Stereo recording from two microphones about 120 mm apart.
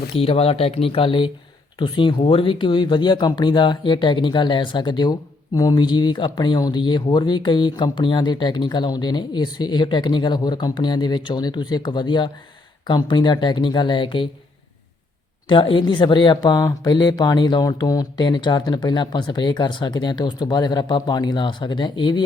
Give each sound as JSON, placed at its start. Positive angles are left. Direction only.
{"t": 0.2, "sound": "speech", "side_deg": 55}
{"t": 15.4, "sound": "speech", "side_deg": 45}